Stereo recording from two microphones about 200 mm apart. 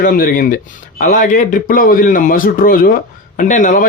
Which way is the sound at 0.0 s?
45° left (ahead or behind).